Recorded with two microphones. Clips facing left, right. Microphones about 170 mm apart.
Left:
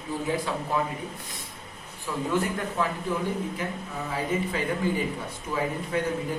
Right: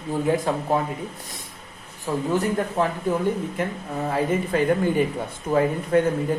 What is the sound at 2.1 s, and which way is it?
Speech, 40° right (ahead or behind).